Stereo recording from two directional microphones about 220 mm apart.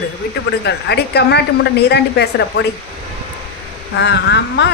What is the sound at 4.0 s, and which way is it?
Speech, 50° left (ahead or behind).